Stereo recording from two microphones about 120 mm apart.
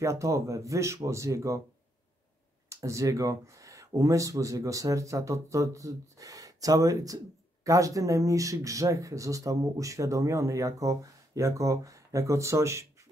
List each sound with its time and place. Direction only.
0.0 s speech: 25° right (ahead or behind)
2.7 s speech: 25° right (ahead or behind)